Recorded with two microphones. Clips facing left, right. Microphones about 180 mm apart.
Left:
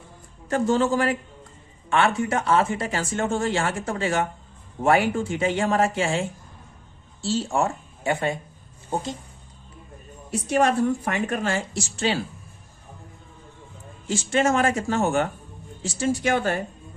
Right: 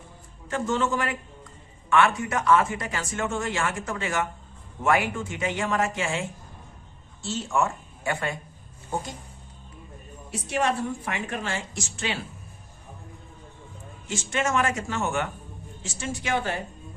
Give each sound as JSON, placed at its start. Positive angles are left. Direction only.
{"t": 0.5, "sound": "speech", "side_deg": 35}
{"t": 8.0, "sound": "a woman's voice", "side_deg": 20}
{"t": 10.5, "sound": "speech", "side_deg": 45}
{"t": 14.1, "sound": "speech", "side_deg": 35}